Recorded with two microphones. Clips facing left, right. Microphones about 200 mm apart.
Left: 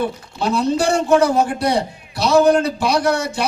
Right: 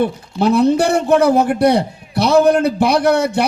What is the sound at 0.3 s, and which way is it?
A man's voice, 60° right (ahead or behind).